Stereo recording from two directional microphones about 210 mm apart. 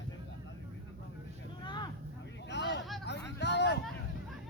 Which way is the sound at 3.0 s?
55° left (ahead or behind).